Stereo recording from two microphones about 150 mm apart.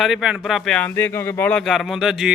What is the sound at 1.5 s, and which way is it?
Speech, 5° left (ahead or behind).